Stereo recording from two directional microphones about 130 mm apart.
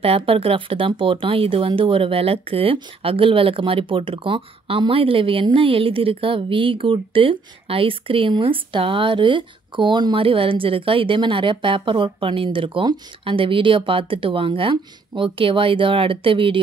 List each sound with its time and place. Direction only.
0.0 s speech: 45° right (ahead or behind)